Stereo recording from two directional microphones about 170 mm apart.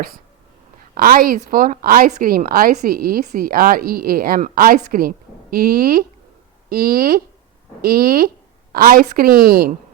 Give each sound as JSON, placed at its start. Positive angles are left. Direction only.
{"t": 0.9, "sound": "a woman's voice", "side_deg": -60}